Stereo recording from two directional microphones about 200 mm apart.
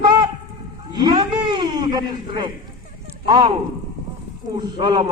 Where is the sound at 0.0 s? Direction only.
20° right (ahead or behind).